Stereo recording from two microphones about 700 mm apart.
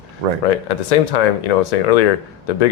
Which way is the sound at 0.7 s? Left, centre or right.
Left.